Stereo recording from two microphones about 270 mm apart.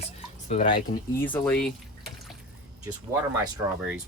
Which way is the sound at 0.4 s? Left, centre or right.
Left.